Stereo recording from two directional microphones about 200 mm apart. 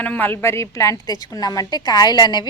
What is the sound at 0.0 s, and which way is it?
A woman's voice, 10° left (ahead or behind).